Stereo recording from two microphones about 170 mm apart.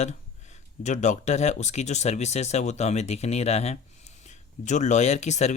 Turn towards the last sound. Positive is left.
turn(degrees=40)  # may be behind; listen again after turning